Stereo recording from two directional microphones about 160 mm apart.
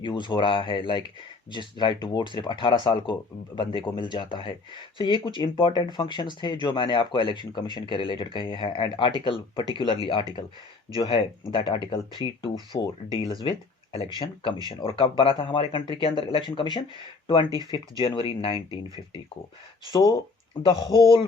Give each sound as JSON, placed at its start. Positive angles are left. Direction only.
{"t": 0.0, "sound": "speech", "side_deg": 30}
{"t": 14.7, "sound": "speech", "side_deg": 30}